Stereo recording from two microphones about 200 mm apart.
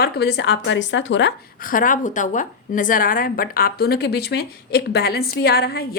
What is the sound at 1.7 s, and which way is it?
A woman's voice, 40° left (ahead or behind).